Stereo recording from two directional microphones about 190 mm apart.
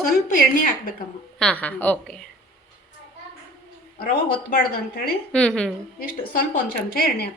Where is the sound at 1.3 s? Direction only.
5° left (ahead or behind).